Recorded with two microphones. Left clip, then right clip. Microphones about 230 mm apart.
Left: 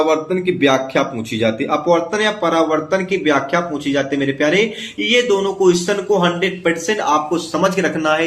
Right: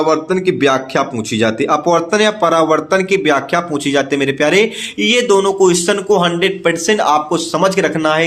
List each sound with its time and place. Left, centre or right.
0.1 s speech: right